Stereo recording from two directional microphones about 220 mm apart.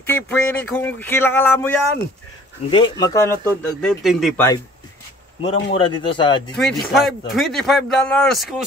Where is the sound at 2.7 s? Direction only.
15° left (ahead or behind); by 4.5 s centre (ahead or behind).